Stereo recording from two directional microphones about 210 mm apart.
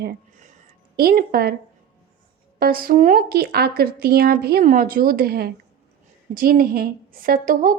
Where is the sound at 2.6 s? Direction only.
45° right (ahead or behind).